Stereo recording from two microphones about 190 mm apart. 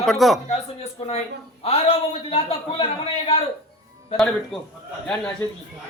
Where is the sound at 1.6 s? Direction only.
30° left (ahead or behind).